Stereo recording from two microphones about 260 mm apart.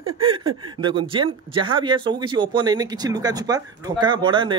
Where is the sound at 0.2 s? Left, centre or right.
Centre.